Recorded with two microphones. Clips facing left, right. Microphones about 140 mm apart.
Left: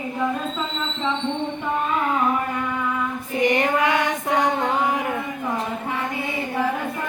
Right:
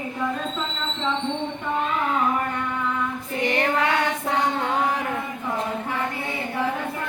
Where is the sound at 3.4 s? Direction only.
15° left (ahead or behind).